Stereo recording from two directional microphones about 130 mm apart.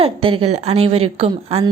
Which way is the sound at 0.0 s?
45° right (ahead or behind).